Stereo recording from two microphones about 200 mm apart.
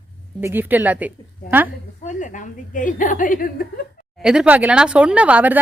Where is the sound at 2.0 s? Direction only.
40° left (ahead or behind).